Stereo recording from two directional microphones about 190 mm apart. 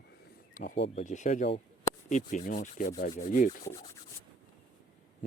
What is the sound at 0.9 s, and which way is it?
Rub, 40° left (ahead or behind).